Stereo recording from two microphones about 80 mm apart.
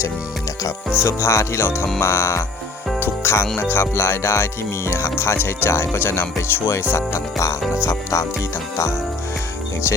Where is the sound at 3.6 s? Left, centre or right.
Left.